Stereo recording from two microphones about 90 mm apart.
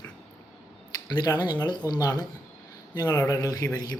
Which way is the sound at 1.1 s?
50° left (ahead or behind).